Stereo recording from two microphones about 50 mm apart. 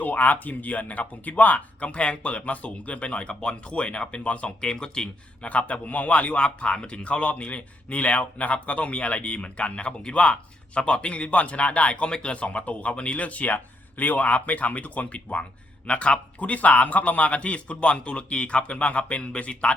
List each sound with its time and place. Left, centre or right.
0.0 s speech: left; by 5.5 s centre
5.5 s speech: left